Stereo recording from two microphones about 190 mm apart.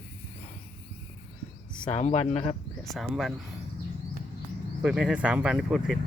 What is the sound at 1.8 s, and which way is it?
Speech, 35° left (ahead or behind).